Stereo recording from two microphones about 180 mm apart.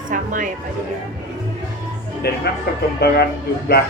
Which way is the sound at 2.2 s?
60° left (ahead or behind).